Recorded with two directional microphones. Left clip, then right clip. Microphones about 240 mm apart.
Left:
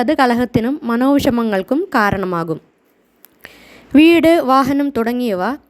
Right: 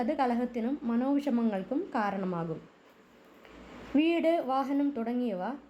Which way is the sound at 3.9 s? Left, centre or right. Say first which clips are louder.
Left 17 dB; left.